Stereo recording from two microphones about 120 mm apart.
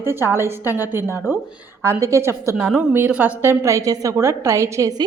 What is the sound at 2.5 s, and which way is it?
A woman's voice, 10° right (ahead or behind).